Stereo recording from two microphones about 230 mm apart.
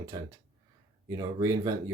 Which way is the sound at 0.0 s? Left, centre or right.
Centre.